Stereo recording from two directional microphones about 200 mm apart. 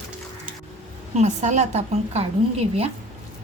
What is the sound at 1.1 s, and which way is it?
A woman's voice, 35° right (ahead or behind).